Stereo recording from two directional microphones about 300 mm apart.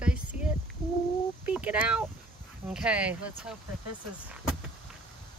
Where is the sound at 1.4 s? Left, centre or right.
Centre.